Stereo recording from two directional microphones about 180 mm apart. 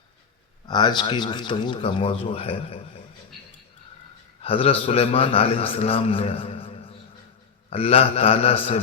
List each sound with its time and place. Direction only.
0.7 s speech: 25° left (ahead or behind)
4.4 s a man's voice: 30° left (ahead or behind)